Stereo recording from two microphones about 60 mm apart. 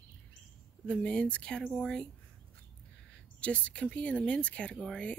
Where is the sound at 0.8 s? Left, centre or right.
Centre.